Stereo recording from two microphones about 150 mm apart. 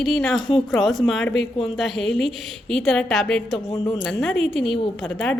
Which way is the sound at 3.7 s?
20° left (ahead or behind).